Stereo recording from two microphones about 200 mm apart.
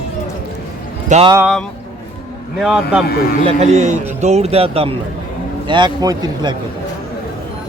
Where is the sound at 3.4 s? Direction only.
35° right (ahead or behind).